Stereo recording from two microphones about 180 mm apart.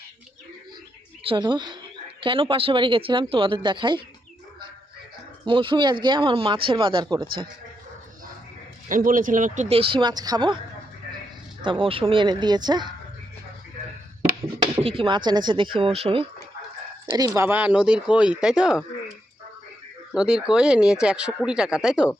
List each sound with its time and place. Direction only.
1.2 s a woman's voice: 30° right (ahead or behind)
5.5 s speech: 30° right (ahead or behind)
8.9 s speech: 50° right (ahead or behind); by 10.6 s 25° right (ahead or behind)
11.6 s speech: 30° right (ahead or behind)
14.6 s speech: 30° right (ahead or behind)
17.1 s speech: 15° right (ahead or behind)
20.1 s speech: 5° right (ahead or behind)